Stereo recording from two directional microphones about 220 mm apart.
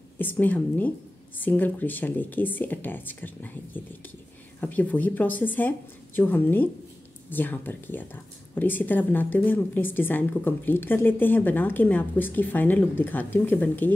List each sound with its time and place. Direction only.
0.2 s speech: 10° left (ahead or behind)